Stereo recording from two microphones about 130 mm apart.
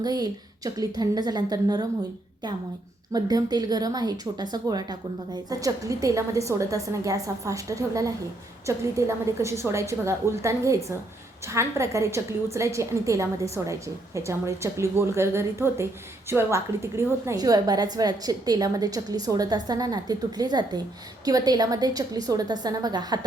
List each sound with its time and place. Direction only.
0.0 s a woman's voice: 30° right (ahead or behind)
3.1 s a woman's voice: 30° right (ahead or behind)